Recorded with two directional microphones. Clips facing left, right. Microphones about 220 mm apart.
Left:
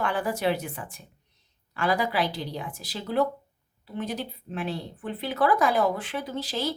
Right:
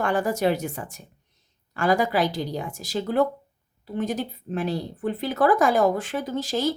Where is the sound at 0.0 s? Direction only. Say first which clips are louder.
Right 4 dB; 45° right (ahead or behind).